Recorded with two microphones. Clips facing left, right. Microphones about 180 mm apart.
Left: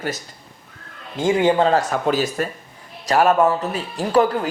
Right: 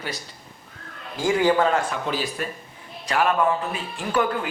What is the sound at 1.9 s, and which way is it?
A man's voice, 45° left (ahead or behind).